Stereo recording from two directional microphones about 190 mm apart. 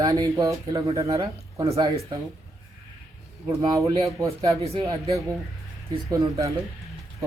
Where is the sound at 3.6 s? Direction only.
20° right (ahead or behind).